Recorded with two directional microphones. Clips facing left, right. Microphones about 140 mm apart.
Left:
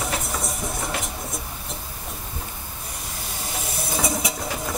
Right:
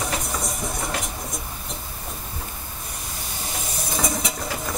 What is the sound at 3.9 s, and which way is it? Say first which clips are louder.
Vehicle: left 1 dB; 5° left (ahead or behind).